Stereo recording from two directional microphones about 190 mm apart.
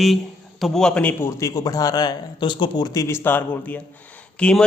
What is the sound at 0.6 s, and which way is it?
A man's voice, centre (ahead or behind).